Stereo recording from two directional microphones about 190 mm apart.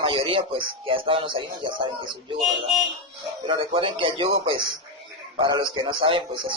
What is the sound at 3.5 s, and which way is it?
A man's voice, 25° right (ahead or behind).